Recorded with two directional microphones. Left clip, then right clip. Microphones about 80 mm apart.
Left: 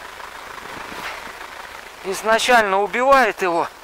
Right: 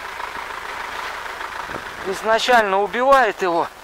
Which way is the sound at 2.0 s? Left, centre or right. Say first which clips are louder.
Left 1 dB; left.